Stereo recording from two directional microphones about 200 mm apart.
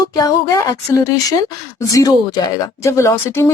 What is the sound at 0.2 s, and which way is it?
Speech, 20° left (ahead or behind).